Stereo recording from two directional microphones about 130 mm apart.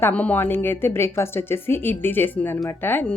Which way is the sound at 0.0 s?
10° left (ahead or behind).